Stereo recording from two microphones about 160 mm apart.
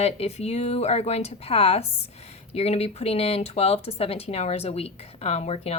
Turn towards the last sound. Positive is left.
turn(degrees=40)  # may be behind; listen again after turning